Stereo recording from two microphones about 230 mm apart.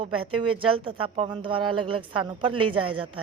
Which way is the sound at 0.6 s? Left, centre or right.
Right.